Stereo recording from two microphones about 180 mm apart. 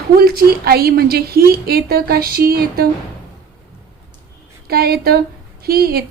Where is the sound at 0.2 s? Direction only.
60° right (ahead or behind).